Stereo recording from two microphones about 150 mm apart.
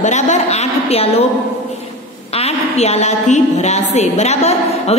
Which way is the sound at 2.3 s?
45° left (ahead or behind).